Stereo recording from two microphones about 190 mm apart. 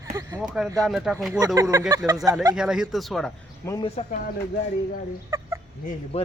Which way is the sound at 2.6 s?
5° right (ahead or behind).